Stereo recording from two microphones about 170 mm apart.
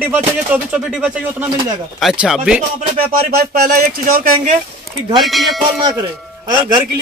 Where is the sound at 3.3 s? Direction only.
60° right (ahead or behind).